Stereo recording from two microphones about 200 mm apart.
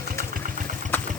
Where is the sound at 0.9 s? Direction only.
10° left (ahead or behind).